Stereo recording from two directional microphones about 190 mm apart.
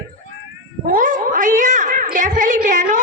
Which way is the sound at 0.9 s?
45° right (ahead or behind).